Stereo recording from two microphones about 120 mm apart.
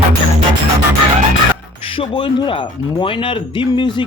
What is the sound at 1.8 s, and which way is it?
Speech, 50° left (ahead or behind).